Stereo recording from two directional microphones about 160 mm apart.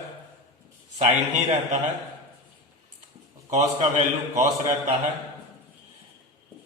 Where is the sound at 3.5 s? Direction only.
45° right (ahead or behind).